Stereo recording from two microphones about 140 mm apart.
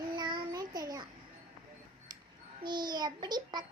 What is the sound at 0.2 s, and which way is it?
Child singing, 35° right (ahead or behind).